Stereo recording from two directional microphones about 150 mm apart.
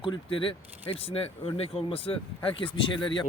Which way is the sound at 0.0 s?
35° left (ahead or behind).